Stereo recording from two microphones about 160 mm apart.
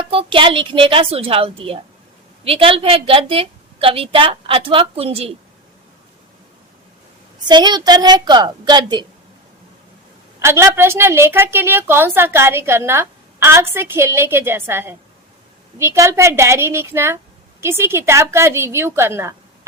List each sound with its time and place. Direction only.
0.1 s a woman's voice: 35° right (ahead or behind)
7.4 s a woman's voice: 25° right (ahead or behind)
10.4 s a woman's voice: 15° right (ahead or behind)